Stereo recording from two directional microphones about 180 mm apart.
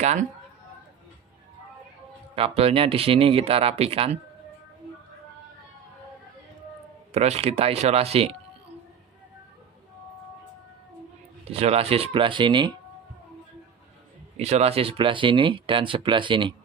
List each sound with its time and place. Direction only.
0.0 s speech: 40° right (ahead or behind)
2.3 s speech: 30° right (ahead or behind)
7.2 s speech: 35° right (ahead or behind)
11.4 s speech: 35° right (ahead or behind)
14.3 s speech: 35° right (ahead or behind)